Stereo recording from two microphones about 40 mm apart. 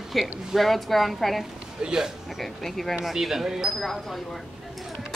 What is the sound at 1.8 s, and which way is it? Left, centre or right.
Speech, centre.